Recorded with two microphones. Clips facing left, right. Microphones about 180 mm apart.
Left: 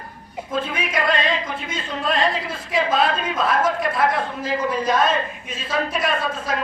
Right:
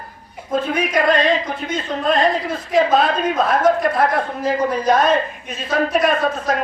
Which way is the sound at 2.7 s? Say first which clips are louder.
Right 4 dB; 45° right (ahead or behind).